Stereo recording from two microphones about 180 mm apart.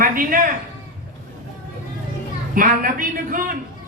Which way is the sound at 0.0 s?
50° right (ahead or behind).